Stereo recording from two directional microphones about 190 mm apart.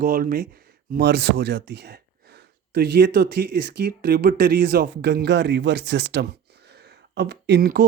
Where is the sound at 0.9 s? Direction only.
65° right (ahead or behind).